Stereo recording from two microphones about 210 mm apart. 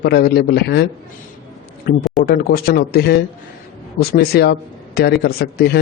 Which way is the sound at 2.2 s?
45° left (ahead or behind).